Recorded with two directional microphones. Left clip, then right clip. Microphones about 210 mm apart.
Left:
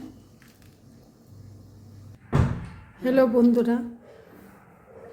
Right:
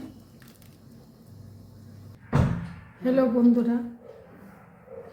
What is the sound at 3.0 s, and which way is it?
Speech, 40° left (ahead or behind).